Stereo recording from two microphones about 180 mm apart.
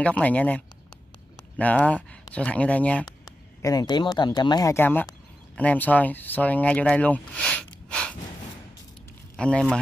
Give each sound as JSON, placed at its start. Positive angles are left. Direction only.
{"t": 0.0, "sound": "speech", "side_deg": 10}
{"t": 3.1, "sound": "speech", "side_deg": 20}
{"t": 9.4, "sound": "speech", "side_deg": 5}